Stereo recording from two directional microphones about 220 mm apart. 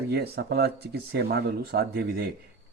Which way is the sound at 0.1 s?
45° right (ahead or behind).